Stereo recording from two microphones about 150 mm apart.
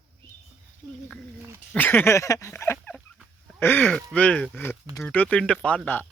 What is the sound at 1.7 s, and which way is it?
Speech, 10° left (ahead or behind).